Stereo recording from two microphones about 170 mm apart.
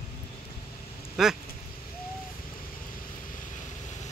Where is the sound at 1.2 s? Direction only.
Centre (ahead or behind).